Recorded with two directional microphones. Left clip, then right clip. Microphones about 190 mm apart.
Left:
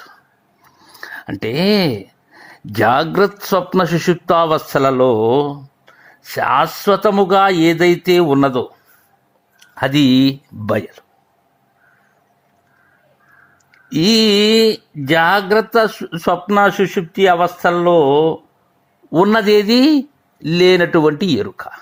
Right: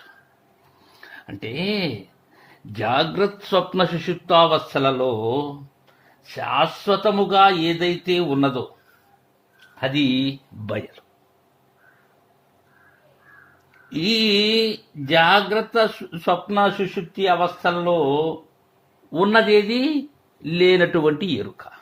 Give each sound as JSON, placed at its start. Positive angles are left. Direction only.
{"t": 1.0, "sound": "speech", "side_deg": 45}
{"t": 9.7, "sound": "speech", "side_deg": 50}
{"t": 13.7, "sound": "a sound", "side_deg": 45}
{"t": 15.0, "sound": "speech", "side_deg": 45}